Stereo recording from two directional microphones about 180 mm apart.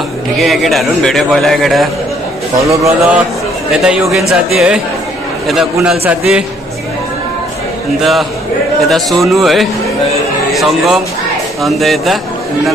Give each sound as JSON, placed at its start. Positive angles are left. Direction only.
{"t": 0.4, "sound": "a man's voice", "side_deg": 0}
{"t": 2.7, "sound": "a man's voice", "side_deg": -15}
{"t": 3.7, "sound": "a man's voice", "side_deg": -5}
{"t": 5.9, "sound": "a man's voice", "side_deg": -5}
{"t": 8.0, "sound": "a man's voice", "side_deg": 0}